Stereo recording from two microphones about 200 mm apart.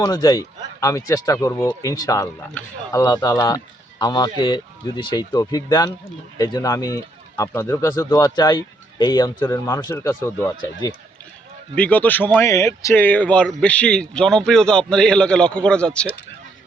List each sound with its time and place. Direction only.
0.0 s speech: 20° left (ahead or behind)